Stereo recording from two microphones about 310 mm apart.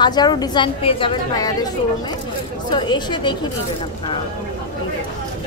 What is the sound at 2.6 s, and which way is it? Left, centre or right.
Speech, centre.